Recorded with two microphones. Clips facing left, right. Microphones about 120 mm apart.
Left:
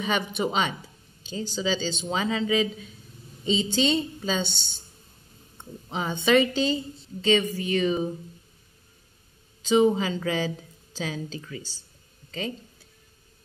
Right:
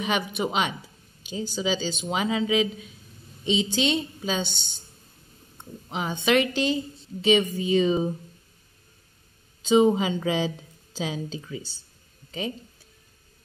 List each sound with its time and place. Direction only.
0.0 s a woman's voice: 5° right (ahead or behind)
5.9 s a woman's voice: 5° right (ahead or behind)
9.6 s a woman's voice: 20° right (ahead or behind)